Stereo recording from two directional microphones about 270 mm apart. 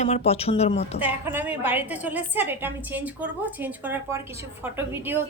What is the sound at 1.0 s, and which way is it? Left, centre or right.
A woman's voice, centre.